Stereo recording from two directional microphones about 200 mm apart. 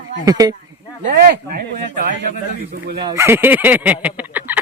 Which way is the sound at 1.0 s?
45° right (ahead or behind).